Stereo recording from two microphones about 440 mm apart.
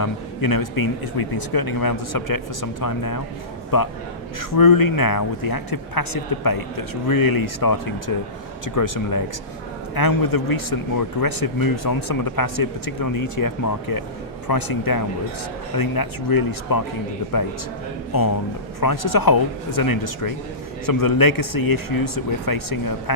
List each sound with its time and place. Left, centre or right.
0.0 s speech: left
18.8 s speech: left